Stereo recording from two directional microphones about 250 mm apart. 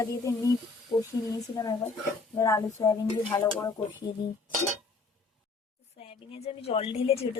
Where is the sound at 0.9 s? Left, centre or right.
Left.